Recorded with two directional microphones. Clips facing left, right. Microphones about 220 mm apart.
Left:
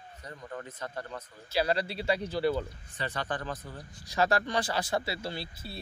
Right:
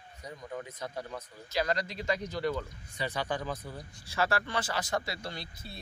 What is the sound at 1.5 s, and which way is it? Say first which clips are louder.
Speech: left 3 dB; 30° left (ahead or behind).